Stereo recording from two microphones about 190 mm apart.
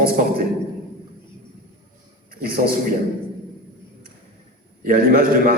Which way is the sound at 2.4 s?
50° right (ahead or behind).